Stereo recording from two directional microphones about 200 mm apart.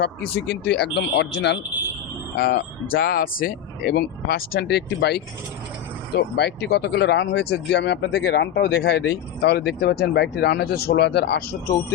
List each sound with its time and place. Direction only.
0.0 s speech: 60° left (ahead or behind)
2.3 s speech: 50° left (ahead or behind)